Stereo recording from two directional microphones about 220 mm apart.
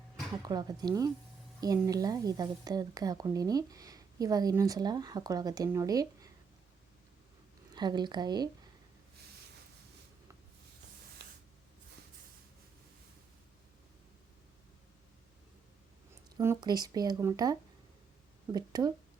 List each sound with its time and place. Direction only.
0.4 s a woman's voice: 20° right (ahead or behind)
7.7 s speech: 20° right (ahead or behind)
16.4 s a woman's voice: 15° right (ahead or behind)